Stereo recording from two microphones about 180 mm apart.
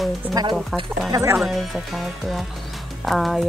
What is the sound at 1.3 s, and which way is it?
Speech, centre (ahead or behind).